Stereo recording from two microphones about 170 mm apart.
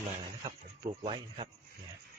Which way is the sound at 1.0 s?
30° right (ahead or behind).